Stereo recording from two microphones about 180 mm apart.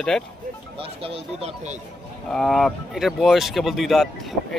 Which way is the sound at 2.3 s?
Centre (ahead or behind).